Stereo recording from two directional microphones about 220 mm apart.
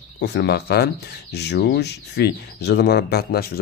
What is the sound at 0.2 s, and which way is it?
Speech, 50° left (ahead or behind).